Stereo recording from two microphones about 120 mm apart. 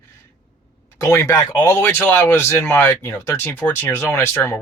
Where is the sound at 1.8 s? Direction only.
15° left (ahead or behind).